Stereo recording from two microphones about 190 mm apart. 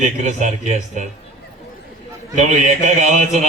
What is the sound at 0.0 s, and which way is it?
A man's voice, 40° right (ahead or behind).